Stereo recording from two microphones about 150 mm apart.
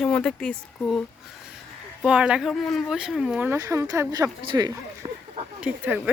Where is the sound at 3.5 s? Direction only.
20° right (ahead or behind).